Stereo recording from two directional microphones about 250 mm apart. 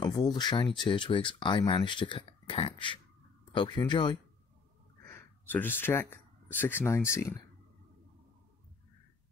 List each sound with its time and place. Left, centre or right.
0.0 s speech: centre